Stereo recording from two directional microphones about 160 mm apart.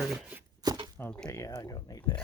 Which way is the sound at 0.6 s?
25° right (ahead or behind).